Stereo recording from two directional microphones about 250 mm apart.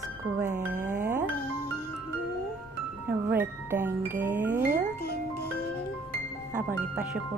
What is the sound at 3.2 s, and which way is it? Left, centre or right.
Speech, centre.